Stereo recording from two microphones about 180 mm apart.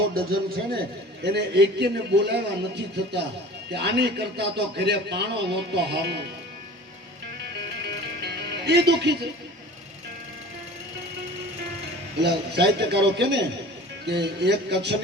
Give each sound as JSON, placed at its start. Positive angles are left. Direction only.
{"t": 0.1, "sound": "a man's voice", "side_deg": -55}
{"t": 1.2, "sound": "speech", "side_deg": -70}
{"t": 8.2, "sound": "music", "side_deg": -65}
{"t": 12.2, "sound": "speech", "side_deg": -70}